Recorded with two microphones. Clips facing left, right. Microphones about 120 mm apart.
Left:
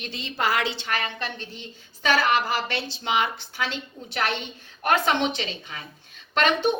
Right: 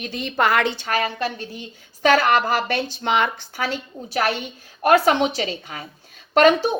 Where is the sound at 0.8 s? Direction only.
40° right (ahead or behind).